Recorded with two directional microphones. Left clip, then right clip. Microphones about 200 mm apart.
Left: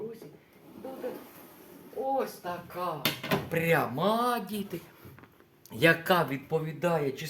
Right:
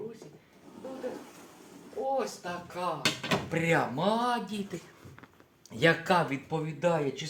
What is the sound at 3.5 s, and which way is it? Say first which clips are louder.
Speech: left 2 dB; 30° left (ahead or behind).